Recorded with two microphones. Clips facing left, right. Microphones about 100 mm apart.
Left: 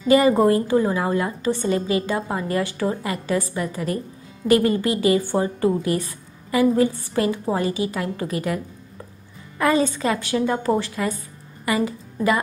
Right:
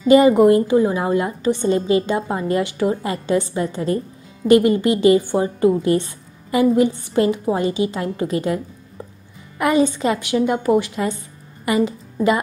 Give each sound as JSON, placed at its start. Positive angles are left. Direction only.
{"t": 0.1, "sound": "a woman's voice", "side_deg": -20}